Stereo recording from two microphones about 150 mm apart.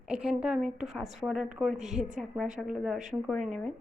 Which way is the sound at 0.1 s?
5° right (ahead or behind).